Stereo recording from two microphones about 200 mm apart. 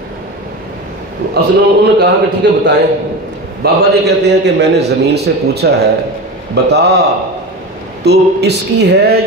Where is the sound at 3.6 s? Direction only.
50° right (ahead or behind).